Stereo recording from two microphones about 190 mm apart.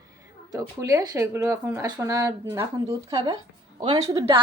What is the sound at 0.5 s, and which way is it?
A woman's voice, 15° right (ahead or behind).